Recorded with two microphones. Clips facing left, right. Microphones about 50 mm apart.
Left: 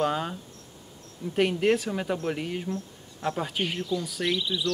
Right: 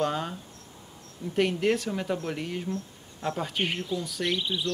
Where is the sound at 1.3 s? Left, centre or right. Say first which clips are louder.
Left 2 dB; centre.